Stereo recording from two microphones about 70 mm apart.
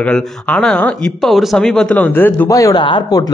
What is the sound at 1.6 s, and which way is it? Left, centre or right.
Speech, centre.